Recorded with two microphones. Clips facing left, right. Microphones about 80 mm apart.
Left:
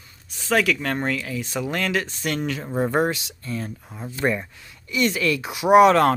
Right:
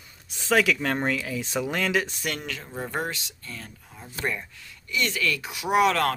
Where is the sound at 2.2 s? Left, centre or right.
Centre.